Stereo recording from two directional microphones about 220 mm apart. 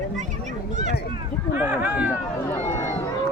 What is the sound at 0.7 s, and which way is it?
Speech, 35° right (ahead or behind).